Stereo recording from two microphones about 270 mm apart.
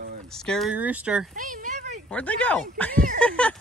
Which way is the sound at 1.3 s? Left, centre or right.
Right.